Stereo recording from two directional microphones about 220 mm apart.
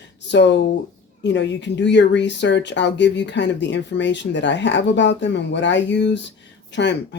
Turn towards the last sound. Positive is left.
turn(degrees=50)  # may be behind; listen again after turning